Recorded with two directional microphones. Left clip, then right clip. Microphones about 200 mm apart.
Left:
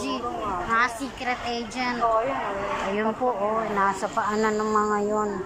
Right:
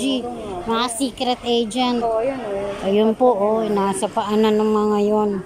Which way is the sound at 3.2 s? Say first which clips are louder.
Right 8 dB; 45° right (ahead or behind).